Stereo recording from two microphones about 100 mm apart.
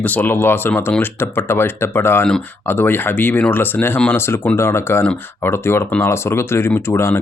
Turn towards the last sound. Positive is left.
turn(degrees=25)  # may be behind; listen again after turning